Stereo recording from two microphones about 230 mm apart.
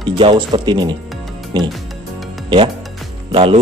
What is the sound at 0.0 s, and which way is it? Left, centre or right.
A man's voice, right.